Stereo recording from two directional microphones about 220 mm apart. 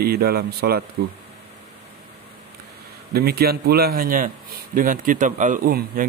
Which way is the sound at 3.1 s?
45° right (ahead or behind).